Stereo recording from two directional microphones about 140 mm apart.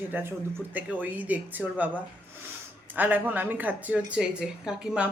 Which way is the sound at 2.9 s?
15° right (ahead or behind).